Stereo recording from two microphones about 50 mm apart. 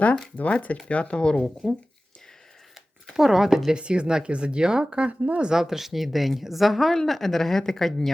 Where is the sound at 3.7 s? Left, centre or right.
Right.